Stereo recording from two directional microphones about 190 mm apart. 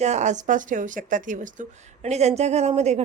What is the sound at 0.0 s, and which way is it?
Speech, 35° right (ahead or behind).